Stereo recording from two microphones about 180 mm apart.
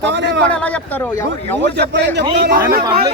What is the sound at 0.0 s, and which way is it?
Speech, 75° right (ahead or behind).